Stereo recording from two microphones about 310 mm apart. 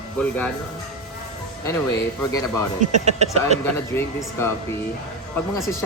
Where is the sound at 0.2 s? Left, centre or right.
Centre.